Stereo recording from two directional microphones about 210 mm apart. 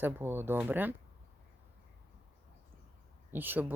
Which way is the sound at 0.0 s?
10° right (ahead or behind).